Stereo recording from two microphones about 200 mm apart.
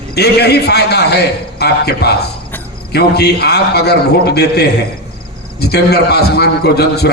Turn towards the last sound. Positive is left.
turn(degrees=55)  # may be behind; listen again after turning